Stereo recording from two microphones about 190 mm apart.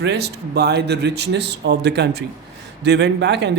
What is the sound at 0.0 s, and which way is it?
A man's voice, 60° right (ahead or behind).